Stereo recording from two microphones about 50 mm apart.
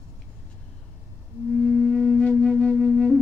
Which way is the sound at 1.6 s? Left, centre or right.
Left.